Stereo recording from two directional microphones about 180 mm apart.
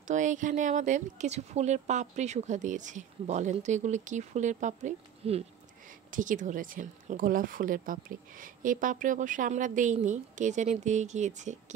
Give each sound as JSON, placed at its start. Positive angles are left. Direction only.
{"t": 0.1, "sound": "speech", "side_deg": -45}